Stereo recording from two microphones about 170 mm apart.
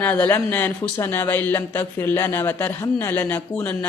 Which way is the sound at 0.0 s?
10° left (ahead or behind).